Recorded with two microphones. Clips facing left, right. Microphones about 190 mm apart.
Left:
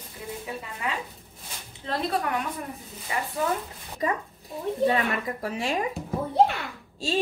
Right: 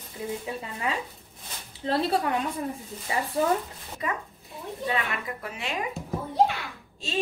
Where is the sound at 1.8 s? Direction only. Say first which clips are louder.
Right 3 dB; 30° right (ahead or behind).